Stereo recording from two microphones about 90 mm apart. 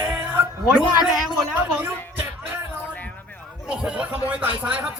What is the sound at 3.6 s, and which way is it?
A man's voice, 10° right (ahead or behind).